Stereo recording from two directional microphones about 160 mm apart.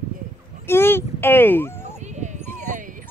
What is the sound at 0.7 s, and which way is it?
Speech, 15° left (ahead or behind).